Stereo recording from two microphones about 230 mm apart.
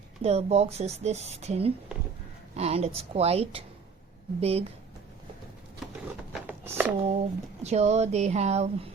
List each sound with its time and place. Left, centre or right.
0.2 s speech: right
6.3 s a sound: centre
7.6 s speech: right